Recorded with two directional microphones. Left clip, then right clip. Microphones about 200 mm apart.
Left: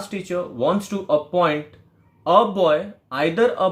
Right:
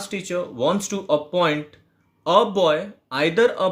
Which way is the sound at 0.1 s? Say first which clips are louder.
Even; 35° right (ahead or behind).